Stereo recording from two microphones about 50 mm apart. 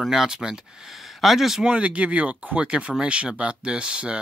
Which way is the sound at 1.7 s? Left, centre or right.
Right.